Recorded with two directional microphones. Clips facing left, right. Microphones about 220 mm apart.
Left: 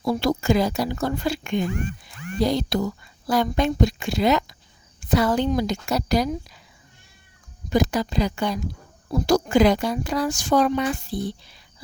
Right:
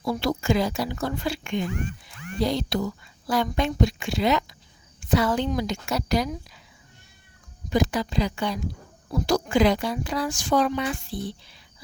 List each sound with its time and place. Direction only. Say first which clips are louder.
0.0 s speech: left 3 dB; 40° left (ahead or behind)
7.7 s speech: left 2 dB; 40° left (ahead or behind)